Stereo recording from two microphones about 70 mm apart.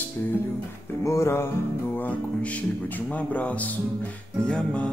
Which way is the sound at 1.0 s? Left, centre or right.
Left.